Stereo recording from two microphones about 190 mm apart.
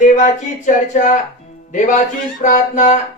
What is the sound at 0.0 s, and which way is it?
Speech, 40° left (ahead or behind).